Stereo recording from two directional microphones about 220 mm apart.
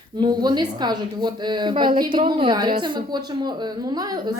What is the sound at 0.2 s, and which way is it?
A woman's voice, 20° right (ahead or behind).